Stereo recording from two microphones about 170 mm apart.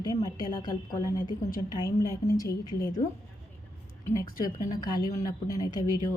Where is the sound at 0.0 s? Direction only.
20° left (ahead or behind).